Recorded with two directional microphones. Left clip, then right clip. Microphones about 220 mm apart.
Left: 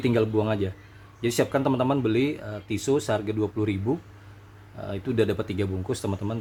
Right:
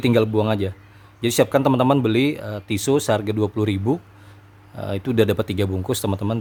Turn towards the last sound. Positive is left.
turn(degrees=-45)  # may be behind; listen again after turning